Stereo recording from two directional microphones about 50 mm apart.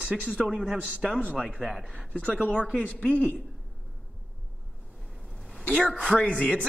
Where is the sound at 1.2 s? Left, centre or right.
Left.